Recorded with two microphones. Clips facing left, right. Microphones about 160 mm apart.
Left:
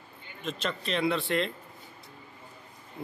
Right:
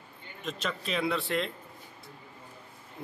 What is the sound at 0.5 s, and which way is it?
Speech, 5° right (ahead or behind).